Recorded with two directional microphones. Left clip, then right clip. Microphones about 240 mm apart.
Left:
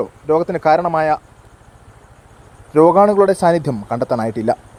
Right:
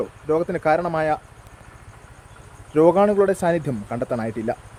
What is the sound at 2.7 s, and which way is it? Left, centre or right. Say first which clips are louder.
Speech: left 5 dB; centre.